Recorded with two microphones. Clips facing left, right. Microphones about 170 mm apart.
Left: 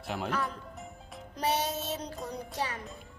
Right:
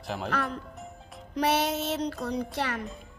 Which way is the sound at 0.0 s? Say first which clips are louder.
Right 1 dB; centre (ahead or behind).